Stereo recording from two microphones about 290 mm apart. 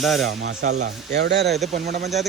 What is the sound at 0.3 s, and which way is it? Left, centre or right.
Speech, right.